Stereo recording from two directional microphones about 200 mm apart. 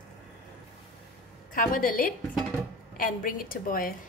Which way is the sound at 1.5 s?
45° left (ahead or behind).